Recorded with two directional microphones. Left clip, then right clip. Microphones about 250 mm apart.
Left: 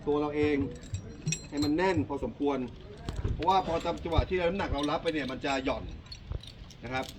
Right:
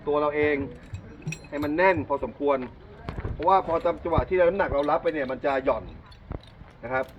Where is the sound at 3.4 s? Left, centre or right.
Left.